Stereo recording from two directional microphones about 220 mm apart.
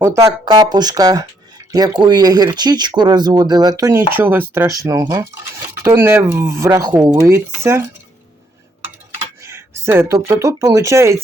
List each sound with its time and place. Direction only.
0.0 s speech: 15° right (ahead or behind)
9.4 s speech: 10° right (ahead or behind)